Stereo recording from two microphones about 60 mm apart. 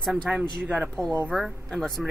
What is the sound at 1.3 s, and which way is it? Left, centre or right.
Speech, centre.